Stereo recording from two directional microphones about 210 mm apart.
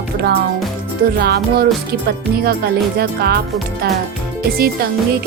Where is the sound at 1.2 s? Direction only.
50° right (ahead or behind).